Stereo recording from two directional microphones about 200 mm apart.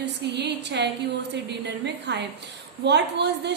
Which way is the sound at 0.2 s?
55° right (ahead or behind).